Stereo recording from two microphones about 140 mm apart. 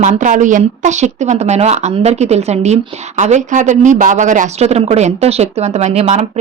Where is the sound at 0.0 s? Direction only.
65° right (ahead or behind).